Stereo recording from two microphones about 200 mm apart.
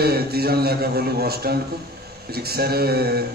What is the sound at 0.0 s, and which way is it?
Speech, 50° right (ahead or behind).